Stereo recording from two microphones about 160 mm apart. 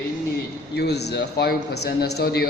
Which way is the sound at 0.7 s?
90° left.